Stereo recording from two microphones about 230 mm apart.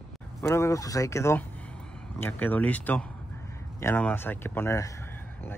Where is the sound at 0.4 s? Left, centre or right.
Centre.